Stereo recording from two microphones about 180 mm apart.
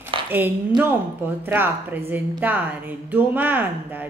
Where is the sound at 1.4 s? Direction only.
10° right (ahead or behind).